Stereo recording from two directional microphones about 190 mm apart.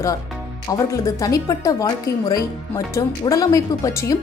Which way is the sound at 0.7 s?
20° left (ahead or behind).